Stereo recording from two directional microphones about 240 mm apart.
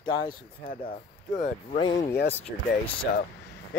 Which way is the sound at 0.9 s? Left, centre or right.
Left.